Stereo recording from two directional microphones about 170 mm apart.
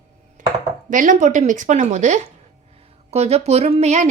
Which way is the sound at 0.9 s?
50° right (ahead or behind).